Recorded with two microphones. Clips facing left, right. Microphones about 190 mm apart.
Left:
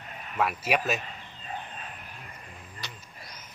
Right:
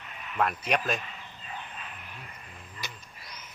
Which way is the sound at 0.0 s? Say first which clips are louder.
Left 1 dB; 40° left (ahead or behind).